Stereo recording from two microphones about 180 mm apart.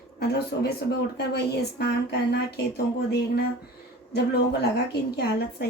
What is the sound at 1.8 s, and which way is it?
A woman's voice, 65° left (ahead or behind).